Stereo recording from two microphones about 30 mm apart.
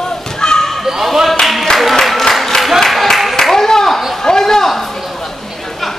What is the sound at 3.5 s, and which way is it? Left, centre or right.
Clapping, centre.